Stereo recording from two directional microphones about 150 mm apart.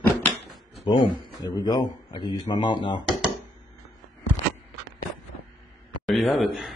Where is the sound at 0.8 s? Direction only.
30° left (ahead or behind).